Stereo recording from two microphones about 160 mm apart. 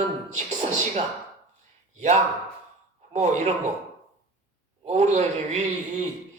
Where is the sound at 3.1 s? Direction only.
45° right (ahead or behind).